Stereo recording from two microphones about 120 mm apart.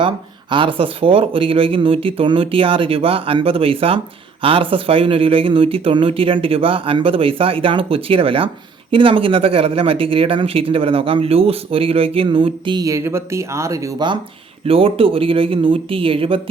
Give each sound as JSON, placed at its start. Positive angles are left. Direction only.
{"t": 0.5, "sound": "speech", "side_deg": -45}
{"t": 12.8, "sound": "speech", "side_deg": -25}
{"t": 14.7, "sound": "speech", "side_deg": -50}